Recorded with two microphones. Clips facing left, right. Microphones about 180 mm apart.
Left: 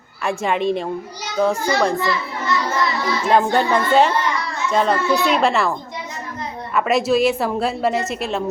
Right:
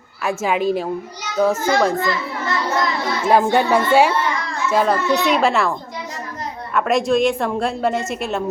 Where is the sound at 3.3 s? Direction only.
10° right (ahead or behind).